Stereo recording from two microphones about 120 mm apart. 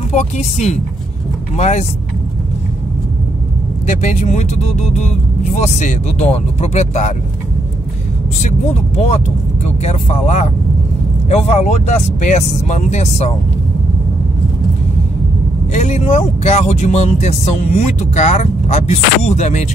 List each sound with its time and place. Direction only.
0.1 s speech: 70° left (ahead or behind)
3.8 s speech: 80° left
8.4 s speech: 75° left (ahead or behind)
15.7 s speech: 70° left (ahead or behind)